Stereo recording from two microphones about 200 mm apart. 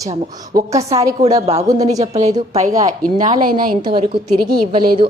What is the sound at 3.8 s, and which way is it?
A woman's voice, 25° right (ahead or behind).